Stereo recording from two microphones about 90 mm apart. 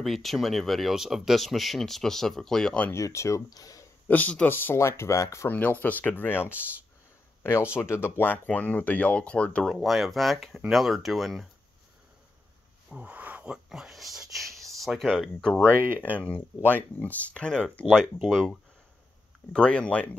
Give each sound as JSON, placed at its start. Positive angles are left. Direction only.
{"t": 0.0, "sound": "speech", "side_deg": 0}
{"t": 2.9, "sound": "speech", "side_deg": 35}
{"t": 4.1, "sound": "speech", "side_deg": 15}
{"t": 5.5, "sound": "speech", "side_deg": 20}
{"t": 9.7, "sound": "speech", "side_deg": 0}
{"t": 12.9, "sound": "speech", "side_deg": -15}
{"t": 15.7, "sound": "speech", "side_deg": -25}
{"t": 16.0, "sound": "speech", "side_deg": 20}